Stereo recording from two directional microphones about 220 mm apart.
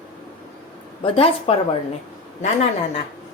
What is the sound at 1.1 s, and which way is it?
A woman's voice, 25° left (ahead or behind).